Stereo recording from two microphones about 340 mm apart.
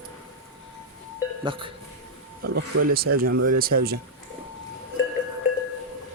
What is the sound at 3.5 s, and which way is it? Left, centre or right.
Speech, right.